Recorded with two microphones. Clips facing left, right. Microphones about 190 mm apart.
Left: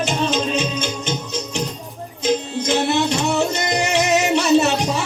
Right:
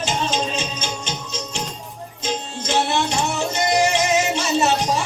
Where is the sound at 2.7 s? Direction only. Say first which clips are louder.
Left 2 dB; 65° left (ahead or behind).